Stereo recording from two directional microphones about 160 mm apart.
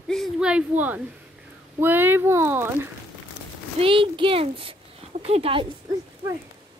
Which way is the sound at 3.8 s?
35° right (ahead or behind).